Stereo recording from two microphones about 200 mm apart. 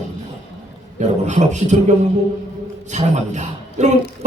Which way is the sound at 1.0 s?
35° right (ahead or behind).